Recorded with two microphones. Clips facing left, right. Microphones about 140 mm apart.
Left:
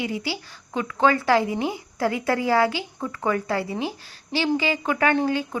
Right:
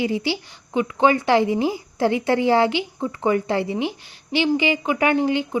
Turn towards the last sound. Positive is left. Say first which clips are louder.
# right 3 dB
turn(degrees=-15)  # may be behind; listen again after turning